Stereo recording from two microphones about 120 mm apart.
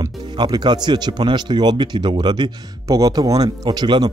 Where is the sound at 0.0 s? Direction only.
35° right (ahead or behind).